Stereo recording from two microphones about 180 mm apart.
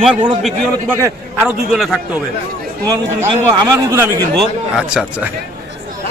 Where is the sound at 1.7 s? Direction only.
Centre (ahead or behind).